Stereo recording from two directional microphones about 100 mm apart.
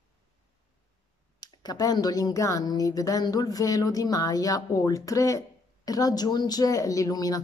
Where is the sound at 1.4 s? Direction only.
40° left (ahead or behind).